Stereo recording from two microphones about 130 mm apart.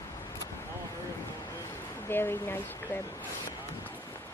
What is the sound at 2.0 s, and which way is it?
Speech, 15° left (ahead or behind).